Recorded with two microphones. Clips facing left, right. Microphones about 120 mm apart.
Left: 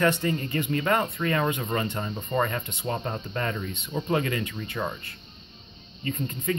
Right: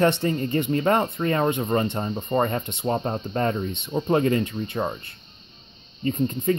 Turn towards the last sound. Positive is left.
turn(degrees=-30)  # may be behind; listen again after turning